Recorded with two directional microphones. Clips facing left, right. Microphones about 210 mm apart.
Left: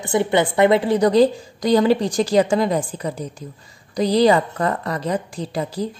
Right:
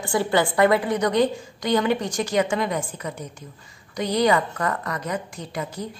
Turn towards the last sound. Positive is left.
turn(degrees=30)  # may be behind; listen again after turning